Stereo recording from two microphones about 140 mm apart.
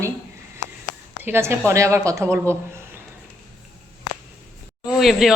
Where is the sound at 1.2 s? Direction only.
15° right (ahead or behind).